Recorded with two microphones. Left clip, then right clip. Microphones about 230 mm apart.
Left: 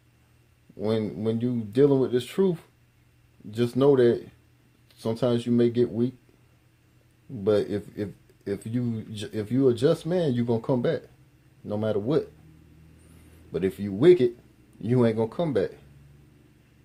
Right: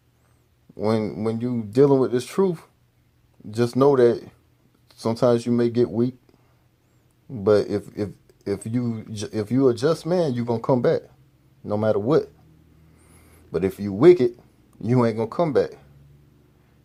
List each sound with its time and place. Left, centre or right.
0.8 s speech: right
3.8 s speech: right
7.4 s speech: right
13.5 s speech: right